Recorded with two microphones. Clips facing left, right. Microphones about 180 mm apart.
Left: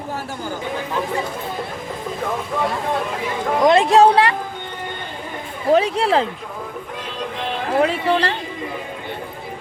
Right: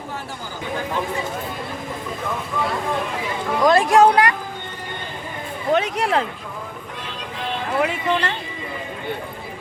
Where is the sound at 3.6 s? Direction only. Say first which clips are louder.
Left 1 dB; 20° left (ahead or behind).